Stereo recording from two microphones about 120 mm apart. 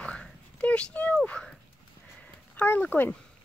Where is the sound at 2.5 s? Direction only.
15° left (ahead or behind).